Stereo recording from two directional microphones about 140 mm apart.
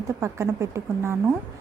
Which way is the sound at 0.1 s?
20° right (ahead or behind).